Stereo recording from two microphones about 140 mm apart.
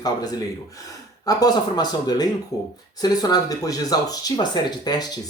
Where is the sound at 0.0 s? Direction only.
25° left (ahead or behind).